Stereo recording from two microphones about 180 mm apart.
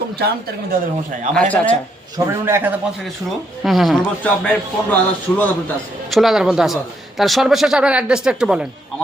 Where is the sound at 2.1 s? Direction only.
15° right (ahead or behind).